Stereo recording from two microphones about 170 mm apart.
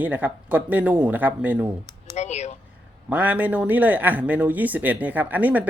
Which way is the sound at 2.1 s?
40° left (ahead or behind).